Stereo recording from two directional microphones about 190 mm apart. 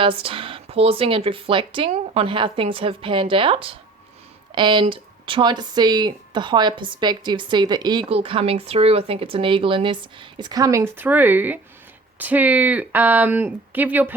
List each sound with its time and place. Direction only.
0.0 s speech: 30° right (ahead or behind); by 14.1 s 10° right (ahead or behind)